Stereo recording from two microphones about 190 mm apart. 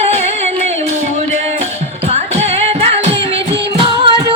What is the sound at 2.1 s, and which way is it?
Music, 35° right (ahead or behind).